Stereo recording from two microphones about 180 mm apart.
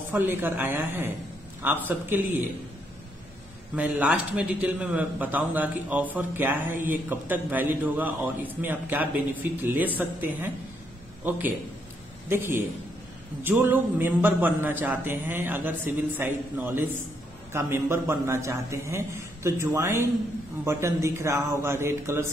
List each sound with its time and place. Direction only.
0.1 s a man's voice: 10° right (ahead or behind)
3.7 s a man's voice: 10° right (ahead or behind)